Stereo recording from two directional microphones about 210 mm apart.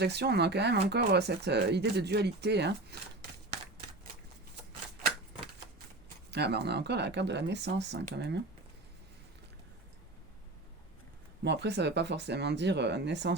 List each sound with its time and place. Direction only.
0.0 s speech: 50° right (ahead or behind)
6.3 s speech: 50° right (ahead or behind)
11.4 s speech: 55° right (ahead or behind)